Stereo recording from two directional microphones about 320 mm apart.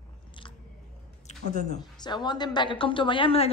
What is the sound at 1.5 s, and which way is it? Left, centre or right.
A woman's voice, left.